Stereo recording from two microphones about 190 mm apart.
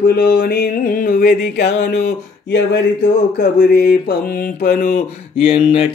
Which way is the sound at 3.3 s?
55° left (ahead or behind).